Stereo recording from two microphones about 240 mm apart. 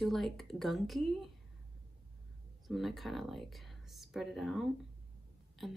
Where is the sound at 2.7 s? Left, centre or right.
Centre.